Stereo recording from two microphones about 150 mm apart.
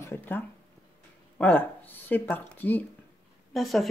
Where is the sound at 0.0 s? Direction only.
15° left (ahead or behind).